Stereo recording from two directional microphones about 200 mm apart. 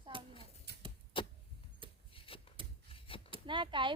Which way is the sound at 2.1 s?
25° left (ahead or behind).